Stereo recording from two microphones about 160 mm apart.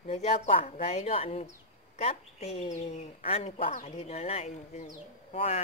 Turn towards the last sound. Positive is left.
turn(degrees=45)  # may be behind; listen again after turning